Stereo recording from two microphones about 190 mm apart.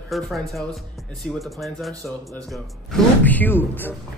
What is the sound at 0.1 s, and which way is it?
Speech, centre (ahead or behind).